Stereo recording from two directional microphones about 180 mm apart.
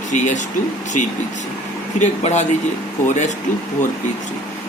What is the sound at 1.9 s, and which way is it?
Speech, 40° left (ahead or behind).